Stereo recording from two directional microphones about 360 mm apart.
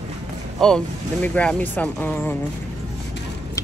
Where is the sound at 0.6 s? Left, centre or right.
Centre.